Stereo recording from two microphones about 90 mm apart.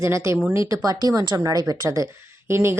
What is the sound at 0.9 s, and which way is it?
Speech, 45° right (ahead or behind).